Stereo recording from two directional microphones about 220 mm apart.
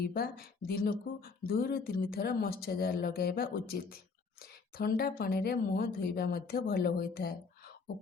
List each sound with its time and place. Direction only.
0.0 s speech: 45° left (ahead or behind)